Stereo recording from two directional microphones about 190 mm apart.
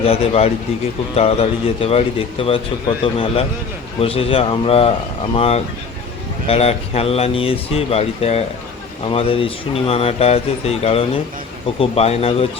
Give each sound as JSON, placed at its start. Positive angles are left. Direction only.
{"t": 0.0, "sound": "a man's voice", "side_deg": 30}